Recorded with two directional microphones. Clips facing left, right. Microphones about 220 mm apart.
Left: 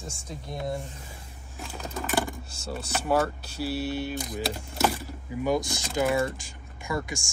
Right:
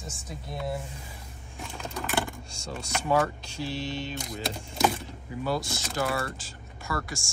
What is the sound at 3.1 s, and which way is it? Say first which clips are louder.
Speech: even; 5° left (ahead or behind).